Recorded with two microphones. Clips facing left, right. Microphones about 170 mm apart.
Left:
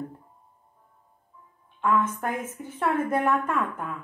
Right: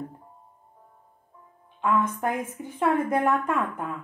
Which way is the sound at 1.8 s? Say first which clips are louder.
Even; 15° right (ahead or behind).